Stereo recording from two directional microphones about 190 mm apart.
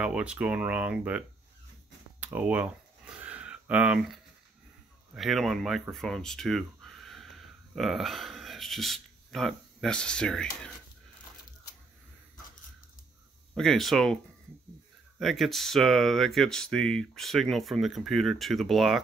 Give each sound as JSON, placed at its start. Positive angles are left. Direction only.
{"t": 0.0, "sound": "speech", "side_deg": -5}
{"t": 2.1, "sound": "a sound", "side_deg": -10}
{"t": 5.1, "sound": "speech", "side_deg": 0}
{"t": 13.6, "sound": "speech", "side_deg": 0}
{"t": 15.1, "sound": "speech", "side_deg": 0}